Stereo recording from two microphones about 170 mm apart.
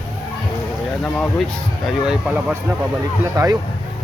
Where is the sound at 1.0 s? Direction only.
5° left (ahead or behind).